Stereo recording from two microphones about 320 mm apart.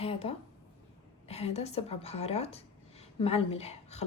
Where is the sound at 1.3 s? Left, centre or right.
Centre.